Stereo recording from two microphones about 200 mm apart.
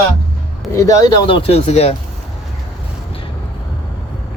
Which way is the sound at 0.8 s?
20° left (ahead or behind).